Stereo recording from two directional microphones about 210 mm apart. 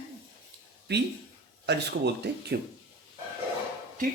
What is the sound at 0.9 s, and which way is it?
Speech, 55° right (ahead or behind).